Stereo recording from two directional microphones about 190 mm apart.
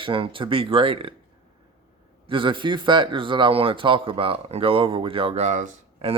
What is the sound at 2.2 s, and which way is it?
Speech, 25° right (ahead or behind).